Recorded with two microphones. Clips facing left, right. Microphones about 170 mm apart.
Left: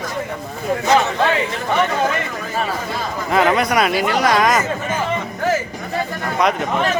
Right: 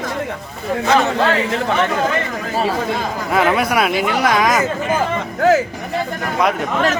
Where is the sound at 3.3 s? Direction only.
5° right (ahead or behind).